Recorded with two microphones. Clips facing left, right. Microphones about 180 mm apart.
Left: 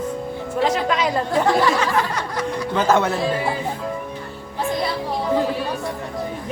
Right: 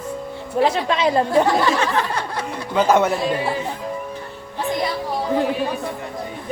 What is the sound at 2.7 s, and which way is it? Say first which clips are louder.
Speech: right 2 dB; 10° right (ahead or behind).